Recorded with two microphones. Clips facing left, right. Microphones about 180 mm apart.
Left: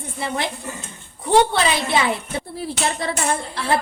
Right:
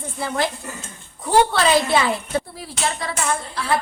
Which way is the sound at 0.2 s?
25° left (ahead or behind).